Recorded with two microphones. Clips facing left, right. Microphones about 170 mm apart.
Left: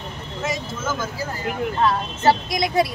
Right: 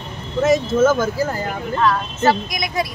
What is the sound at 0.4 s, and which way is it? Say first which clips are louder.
Speech: right 14 dB; 50° right (ahead or behind).